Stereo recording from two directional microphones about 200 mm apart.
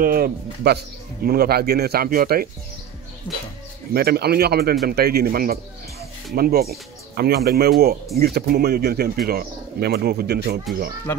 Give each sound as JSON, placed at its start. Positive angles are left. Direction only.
{"t": 0.0, "sound": "speech", "side_deg": -50}
{"t": 3.3, "sound": "speech", "side_deg": 10}
{"t": 3.9, "sound": "speech", "side_deg": -50}
{"t": 11.1, "sound": "speech", "side_deg": 10}